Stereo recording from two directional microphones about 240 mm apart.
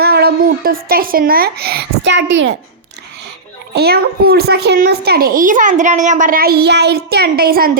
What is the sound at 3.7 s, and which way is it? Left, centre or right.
A child's voice, right.